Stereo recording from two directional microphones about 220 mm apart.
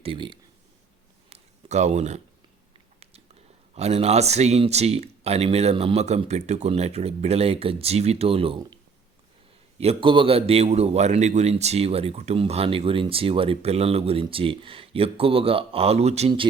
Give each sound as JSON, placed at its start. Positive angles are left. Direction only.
{"t": 0.0, "sound": "a man's voice", "side_deg": -25}
{"t": 1.3, "sound": "a sound", "side_deg": -30}
{"t": 3.8, "sound": "a man's voice", "side_deg": -30}